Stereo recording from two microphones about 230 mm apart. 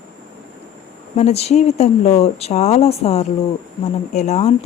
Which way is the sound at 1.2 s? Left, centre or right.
Left.